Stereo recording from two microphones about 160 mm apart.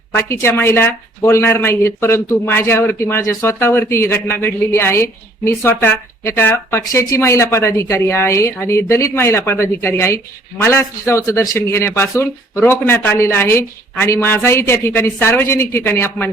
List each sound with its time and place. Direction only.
0.1 s a woman's voice: 15° left (ahead or behind)